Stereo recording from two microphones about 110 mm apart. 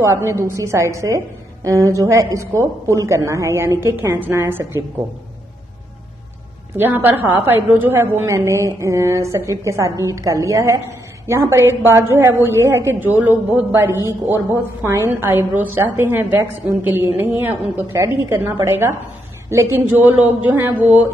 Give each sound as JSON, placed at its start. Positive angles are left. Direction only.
{"t": 0.0, "sound": "a woman's voice", "side_deg": -25}
{"t": 6.8, "sound": "a woman's voice", "side_deg": -15}